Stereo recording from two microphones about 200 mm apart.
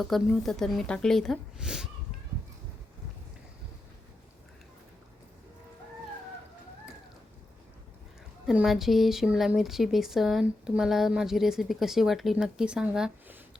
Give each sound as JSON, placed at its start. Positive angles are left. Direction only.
{"t": 0.0, "sound": "a woman's voice", "side_deg": 0}
{"t": 8.4, "sound": "a woman's voice", "side_deg": 0}